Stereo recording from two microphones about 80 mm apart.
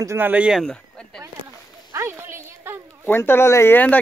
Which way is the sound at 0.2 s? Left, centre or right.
Centre.